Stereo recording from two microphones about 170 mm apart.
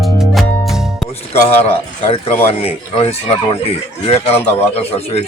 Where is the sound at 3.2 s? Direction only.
35° left (ahead or behind).